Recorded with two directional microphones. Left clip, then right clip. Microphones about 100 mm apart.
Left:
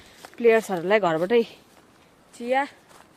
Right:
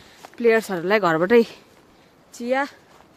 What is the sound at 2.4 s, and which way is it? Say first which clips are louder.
Speech: right 1 dB; 45° right (ahead or behind).